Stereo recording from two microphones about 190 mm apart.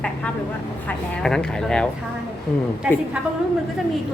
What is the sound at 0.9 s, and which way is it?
Speech, 5° left (ahead or behind).